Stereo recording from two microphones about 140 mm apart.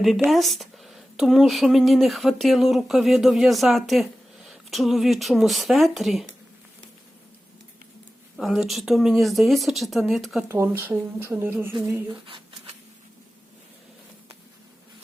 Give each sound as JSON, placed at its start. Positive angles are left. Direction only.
{"t": 0.3, "sound": "speech", "side_deg": 0}
{"t": 8.4, "sound": "speech", "side_deg": 0}
{"t": 10.5, "sound": "speech", "side_deg": -15}